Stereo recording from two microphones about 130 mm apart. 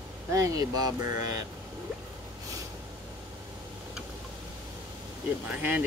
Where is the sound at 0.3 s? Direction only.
30° right (ahead or behind).